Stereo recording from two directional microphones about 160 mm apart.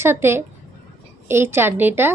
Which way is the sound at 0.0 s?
15° right (ahead or behind).